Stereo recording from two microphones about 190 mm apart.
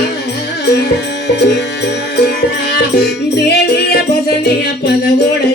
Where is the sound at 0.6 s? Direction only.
60° left (ahead or behind).